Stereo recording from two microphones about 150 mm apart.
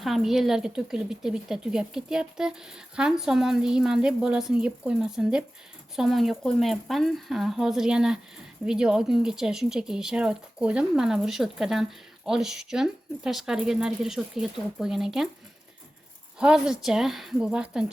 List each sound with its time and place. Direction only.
0.0 s speech: centre (ahead or behind)
16.4 s speech: 5° right (ahead or behind)